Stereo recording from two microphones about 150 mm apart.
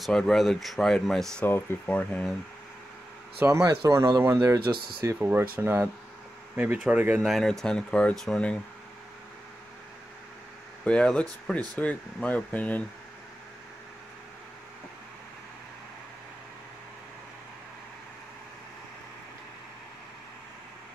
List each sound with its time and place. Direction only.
0.0 s speech: 5° left (ahead or behind)
3.3 s speech: 20° right (ahead or behind); by 8.5 s 5° left (ahead or behind)
10.8 s speech: 5° left (ahead or behind)